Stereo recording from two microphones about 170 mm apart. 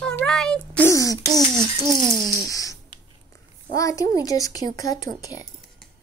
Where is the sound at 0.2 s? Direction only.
5° left (ahead or behind).